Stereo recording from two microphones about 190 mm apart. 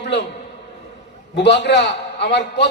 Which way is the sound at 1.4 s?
65° left (ahead or behind).